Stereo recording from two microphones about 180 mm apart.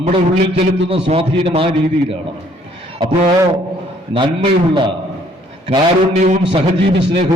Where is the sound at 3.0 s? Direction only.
25° right (ahead or behind).